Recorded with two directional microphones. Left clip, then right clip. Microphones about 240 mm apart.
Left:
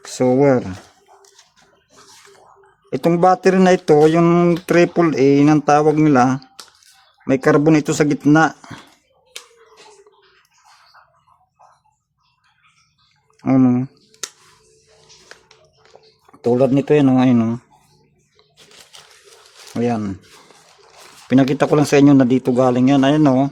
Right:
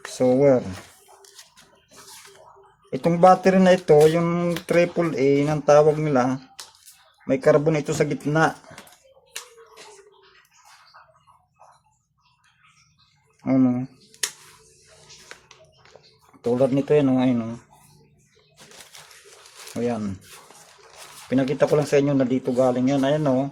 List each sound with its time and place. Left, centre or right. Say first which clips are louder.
0.1 s speech: left 3 dB; left
2.9 s speech: left 2 dB; left
13.4 s a sound: left 6 dB; left
16.4 s speech: left 5 dB; left
19.7 s speech: left 6 dB; left
21.2 s speech: left 5 dB; left